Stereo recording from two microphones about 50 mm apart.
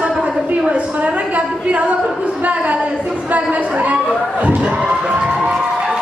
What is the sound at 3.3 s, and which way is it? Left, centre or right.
Speech, right.